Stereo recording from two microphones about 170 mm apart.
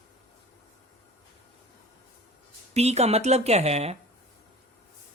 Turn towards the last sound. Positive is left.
turn(degrees=-40)  # may be behind; listen again after turning